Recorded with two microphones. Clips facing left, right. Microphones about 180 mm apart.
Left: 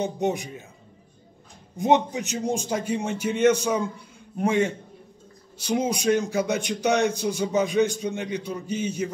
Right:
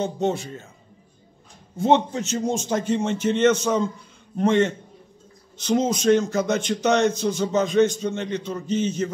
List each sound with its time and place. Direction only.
0.0 s speech: 15° left (ahead or behind)
1.8 s speech: 15° left (ahead or behind)